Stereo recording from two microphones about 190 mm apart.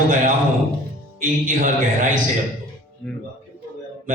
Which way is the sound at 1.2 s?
45° right (ahead or behind).